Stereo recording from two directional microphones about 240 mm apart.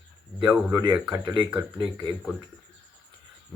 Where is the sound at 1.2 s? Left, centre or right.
Centre.